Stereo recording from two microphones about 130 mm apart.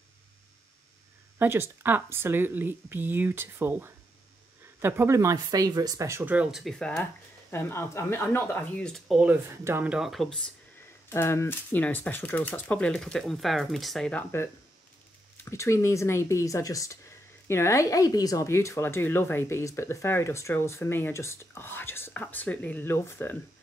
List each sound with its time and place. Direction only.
1.4 s speech: 15° right (ahead or behind); by 7.1 s 5° left (ahead or behind)
7.5 s speech: 20° left (ahead or behind)
8.8 s speech: centre (ahead or behind)
9.5 s speech: 20° right (ahead or behind)
9.8 s speech: 5° right (ahead or behind)
11.1 s speech: 20° left (ahead or behind); by 14.2 s 5° left (ahead or behind)
15.4 s speech: 20° left (ahead or behind)